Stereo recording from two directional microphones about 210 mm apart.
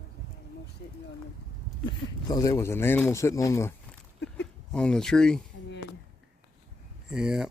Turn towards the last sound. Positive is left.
turn(degrees=-5)  # may be behind; listen again after turning